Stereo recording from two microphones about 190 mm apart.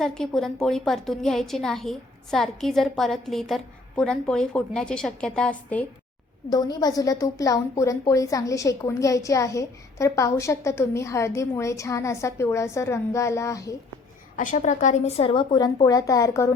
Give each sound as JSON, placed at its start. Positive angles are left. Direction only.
{"t": 0.0, "sound": "a woman's voice", "side_deg": 5}
{"t": 6.5, "sound": "a woman's voice", "side_deg": 20}
{"t": 14.3, "sound": "a woman's voice", "side_deg": 40}